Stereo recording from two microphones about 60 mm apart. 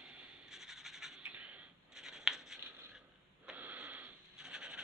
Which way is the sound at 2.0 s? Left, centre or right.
Centre.